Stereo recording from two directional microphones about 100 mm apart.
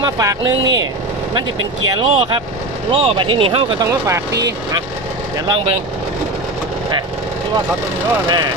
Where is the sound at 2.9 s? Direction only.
75° right (ahead or behind).